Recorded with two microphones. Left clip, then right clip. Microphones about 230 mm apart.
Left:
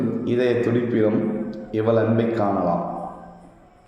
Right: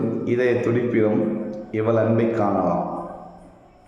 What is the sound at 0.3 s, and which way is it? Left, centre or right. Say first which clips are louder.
A man's voice: even; centre.